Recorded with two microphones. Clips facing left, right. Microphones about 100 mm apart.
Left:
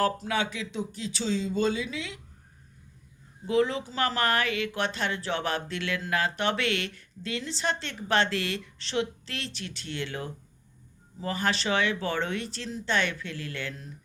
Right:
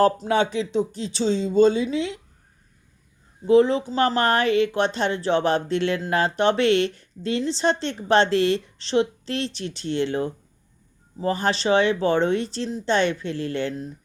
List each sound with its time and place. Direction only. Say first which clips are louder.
0.0 s speech: right 8 dB; 25° right (ahead or behind)
3.4 s speech: right 9 dB; 25° right (ahead or behind)